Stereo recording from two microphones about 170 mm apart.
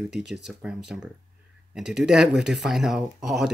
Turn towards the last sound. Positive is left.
turn(degrees=0)  # may be behind; listen again after turning